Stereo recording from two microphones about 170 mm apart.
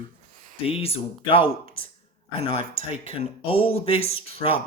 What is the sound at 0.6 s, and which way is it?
Speech, 35° left (ahead or behind).